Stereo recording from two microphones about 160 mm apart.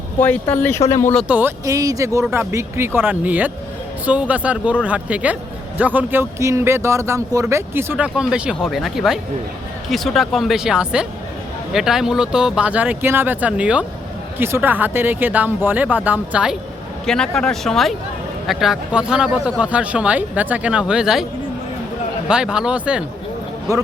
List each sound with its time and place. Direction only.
0.2 s speech: 10° left (ahead or behind)
1.3 s speech: 15° right (ahead or behind)
17.1 s speech: 5° left (ahead or behind)
22.3 s speech: 5° right (ahead or behind)